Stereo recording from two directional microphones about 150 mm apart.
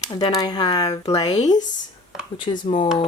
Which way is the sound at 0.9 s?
45° left (ahead or behind).